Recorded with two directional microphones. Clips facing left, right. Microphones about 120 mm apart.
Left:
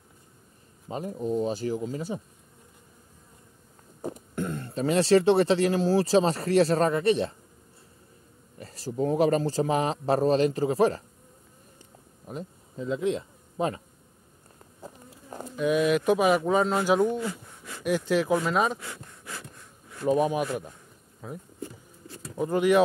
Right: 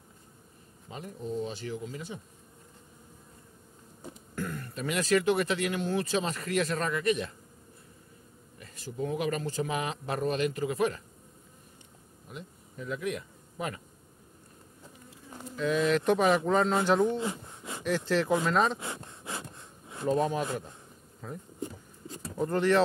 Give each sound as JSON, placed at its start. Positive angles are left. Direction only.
{"t": 0.8, "sound": "speech", "side_deg": 40}
{"t": 4.0, "sound": "throat clearing", "side_deg": 45}
{"t": 4.4, "sound": "speech", "side_deg": 25}
{"t": 8.5, "sound": "speech", "side_deg": 35}
{"t": 12.3, "sound": "speech", "side_deg": 40}
{"t": 12.7, "sound": "speech", "side_deg": 25}
{"t": 15.5, "sound": "speech", "side_deg": 15}
{"t": 17.2, "sound": "a sound", "side_deg": -25}
{"t": 17.8, "sound": "speech", "side_deg": 10}
{"t": 18.8, "sound": "a sound", "side_deg": -25}
{"t": 20.1, "sound": "speech", "side_deg": 15}
{"t": 22.4, "sound": "speech", "side_deg": 10}